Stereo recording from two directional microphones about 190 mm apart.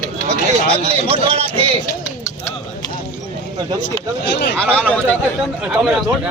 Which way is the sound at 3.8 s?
65° left (ahead or behind).